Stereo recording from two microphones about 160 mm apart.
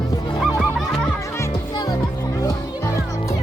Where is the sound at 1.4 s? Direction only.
25° left (ahead or behind).